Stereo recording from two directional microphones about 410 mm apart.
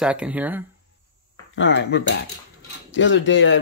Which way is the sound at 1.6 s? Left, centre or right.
Left.